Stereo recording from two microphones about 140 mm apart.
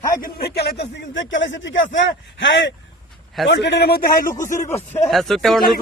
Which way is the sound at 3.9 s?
90° left.